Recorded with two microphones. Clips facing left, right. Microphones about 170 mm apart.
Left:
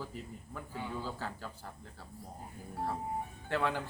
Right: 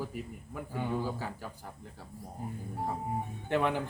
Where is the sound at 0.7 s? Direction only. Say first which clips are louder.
Right 7 dB; 55° right (ahead or behind).